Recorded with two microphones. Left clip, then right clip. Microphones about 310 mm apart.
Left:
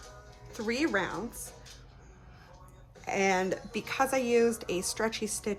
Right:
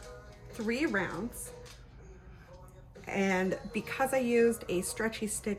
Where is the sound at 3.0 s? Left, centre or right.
Centre.